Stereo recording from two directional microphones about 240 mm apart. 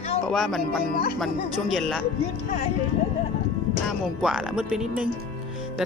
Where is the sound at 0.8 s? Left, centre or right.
Left.